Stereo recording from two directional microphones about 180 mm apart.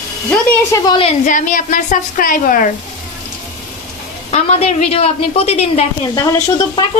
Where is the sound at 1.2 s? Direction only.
45° left (ahead or behind).